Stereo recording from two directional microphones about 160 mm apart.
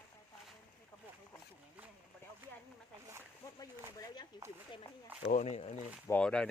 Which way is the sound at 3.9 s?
25° left (ahead or behind).